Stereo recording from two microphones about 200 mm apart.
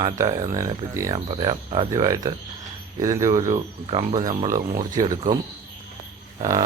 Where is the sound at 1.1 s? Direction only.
25° right (ahead or behind).